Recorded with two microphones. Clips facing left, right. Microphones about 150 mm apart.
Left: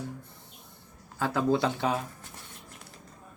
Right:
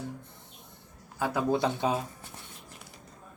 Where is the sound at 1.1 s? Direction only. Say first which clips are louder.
Left 1 dB; 15° right (ahead or behind).